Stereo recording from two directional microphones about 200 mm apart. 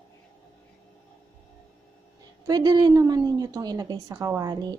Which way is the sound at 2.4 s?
20° right (ahead or behind).